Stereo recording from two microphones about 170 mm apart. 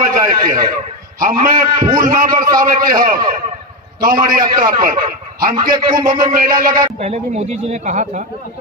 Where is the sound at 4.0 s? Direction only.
60° right (ahead or behind).